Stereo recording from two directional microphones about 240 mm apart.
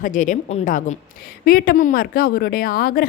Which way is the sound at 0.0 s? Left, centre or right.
Left.